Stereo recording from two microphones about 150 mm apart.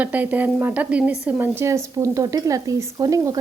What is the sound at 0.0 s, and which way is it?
Speech, 10° right (ahead or behind).